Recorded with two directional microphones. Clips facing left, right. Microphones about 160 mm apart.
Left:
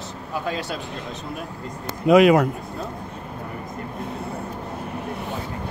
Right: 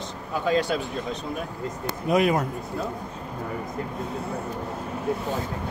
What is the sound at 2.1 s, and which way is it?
Speech, 90° left.